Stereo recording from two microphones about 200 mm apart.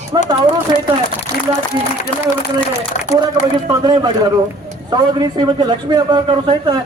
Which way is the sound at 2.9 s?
35° left (ahead or behind).